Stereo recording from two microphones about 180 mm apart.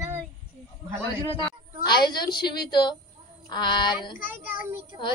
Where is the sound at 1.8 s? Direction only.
25° left (ahead or behind).